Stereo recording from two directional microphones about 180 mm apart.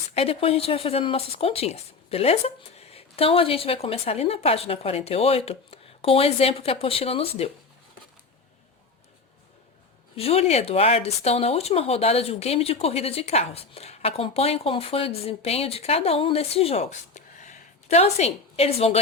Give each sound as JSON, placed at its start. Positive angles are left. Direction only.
{"t": 0.1, "sound": "speech", "side_deg": 35}
{"t": 10.2, "sound": "speech", "side_deg": 35}